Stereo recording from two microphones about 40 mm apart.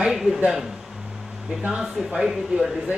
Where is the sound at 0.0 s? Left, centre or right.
Centre.